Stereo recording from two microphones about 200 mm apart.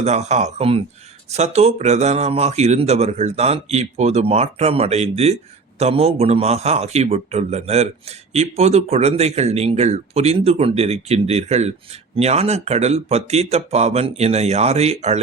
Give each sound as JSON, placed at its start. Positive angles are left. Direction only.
{"t": 0.0, "sound": "speech", "side_deg": -35}